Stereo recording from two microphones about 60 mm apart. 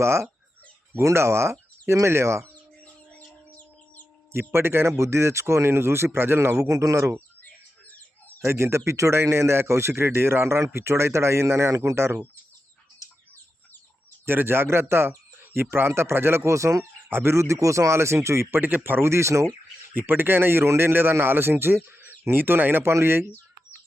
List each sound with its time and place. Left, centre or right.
0.0 s a man's voice: right
2.8 s bird: left
4.3 s a man's voice: right
6.7 s speech: right
7.4 s bird: left
8.4 s a man's voice: right
14.3 s a man's voice: right
17.1 s a man's voice: right
18.6 s a man's voice: right
19.9 s a man's voice: right